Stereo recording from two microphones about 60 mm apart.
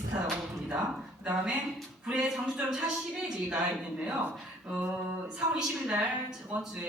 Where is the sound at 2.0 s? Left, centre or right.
Centre.